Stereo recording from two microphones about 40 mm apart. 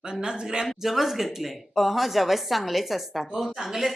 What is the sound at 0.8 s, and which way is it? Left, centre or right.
A woman's voice, centre.